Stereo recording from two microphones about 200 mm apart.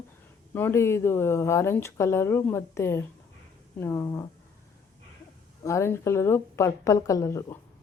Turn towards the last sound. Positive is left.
turn(degrees=15)  # may be behind; listen again after turning